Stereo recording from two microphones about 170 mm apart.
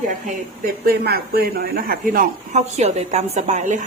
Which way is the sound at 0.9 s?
65° right (ahead or behind).